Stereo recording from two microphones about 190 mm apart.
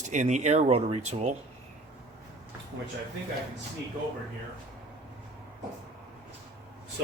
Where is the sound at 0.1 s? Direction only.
40° right (ahead or behind).